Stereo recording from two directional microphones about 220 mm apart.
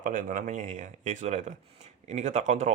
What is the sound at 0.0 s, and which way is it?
Speech, 35° right (ahead or behind).